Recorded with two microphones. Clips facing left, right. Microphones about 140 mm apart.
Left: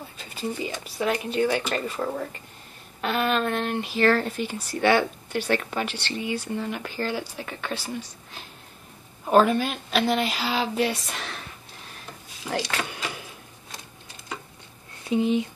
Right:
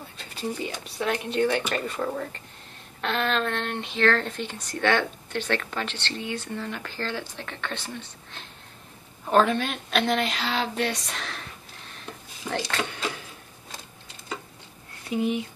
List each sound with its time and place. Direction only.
0.2 s speech: centre (ahead or behind)
9.2 s speech: 5° left (ahead or behind)
12.4 s speech: 5° left (ahead or behind)
15.0 s speech: 25° left (ahead or behind)